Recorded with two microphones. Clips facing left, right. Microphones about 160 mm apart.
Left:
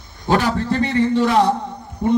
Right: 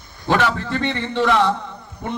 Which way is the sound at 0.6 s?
40° left (ahead or behind).